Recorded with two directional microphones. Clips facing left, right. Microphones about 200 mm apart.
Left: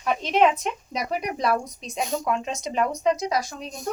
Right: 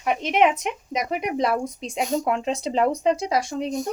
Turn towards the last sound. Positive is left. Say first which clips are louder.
# right 3 dB
turn(degrees=-25)  # may be behind; listen again after turning